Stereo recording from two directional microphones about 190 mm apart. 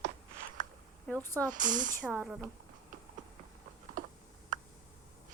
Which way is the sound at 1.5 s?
45° right (ahead or behind).